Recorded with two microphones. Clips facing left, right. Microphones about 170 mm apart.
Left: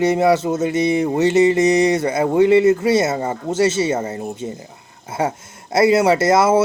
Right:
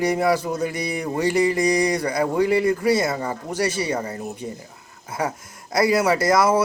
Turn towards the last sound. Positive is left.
turn(degrees=25)  # may be behind; listen again after turning